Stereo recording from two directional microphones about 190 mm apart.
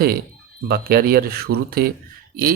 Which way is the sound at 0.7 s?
55° right (ahead or behind).